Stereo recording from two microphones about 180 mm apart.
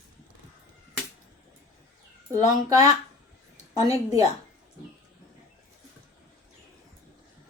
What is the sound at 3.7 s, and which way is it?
Speech, 20° right (ahead or behind).